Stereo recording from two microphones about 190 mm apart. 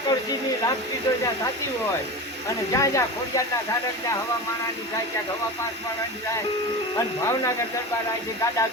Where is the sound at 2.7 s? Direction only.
15° left (ahead or behind).